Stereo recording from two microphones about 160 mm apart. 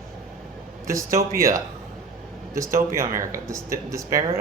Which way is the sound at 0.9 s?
20° right (ahead or behind).